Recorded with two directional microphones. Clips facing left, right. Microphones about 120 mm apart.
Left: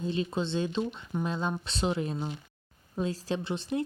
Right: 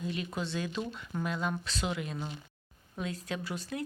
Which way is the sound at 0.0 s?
30° left (ahead or behind).